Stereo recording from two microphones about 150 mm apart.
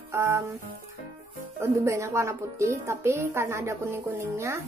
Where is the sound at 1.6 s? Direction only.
20° right (ahead or behind).